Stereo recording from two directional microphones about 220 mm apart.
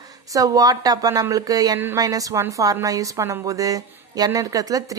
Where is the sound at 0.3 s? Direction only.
15° right (ahead or behind).